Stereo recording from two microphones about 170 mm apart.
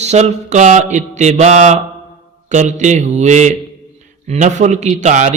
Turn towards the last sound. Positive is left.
turn(degrees=-45)  # may be behind; listen again after turning